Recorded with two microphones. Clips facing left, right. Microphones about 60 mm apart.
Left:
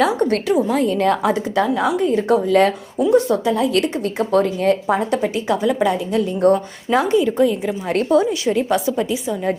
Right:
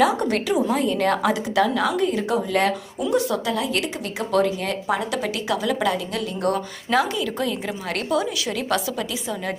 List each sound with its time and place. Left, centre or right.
0.7 s a woman's voice: left
2.3 s a woman's voice: left
3.0 s a woman's voice: left
3.6 s a woman's voice: left
4.3 s a woman's voice: left
5.5 s a woman's voice: left